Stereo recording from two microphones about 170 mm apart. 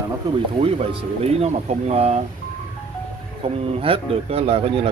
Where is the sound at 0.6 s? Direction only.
35° right (ahead or behind).